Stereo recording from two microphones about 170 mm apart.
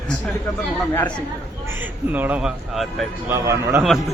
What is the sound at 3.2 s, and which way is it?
Speech, 15° right (ahead or behind).